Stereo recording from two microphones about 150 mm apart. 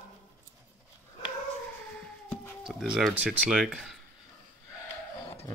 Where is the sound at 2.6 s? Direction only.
Centre (ahead or behind).